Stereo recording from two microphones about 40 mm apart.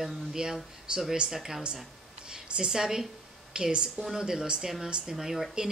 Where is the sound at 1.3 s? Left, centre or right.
Centre.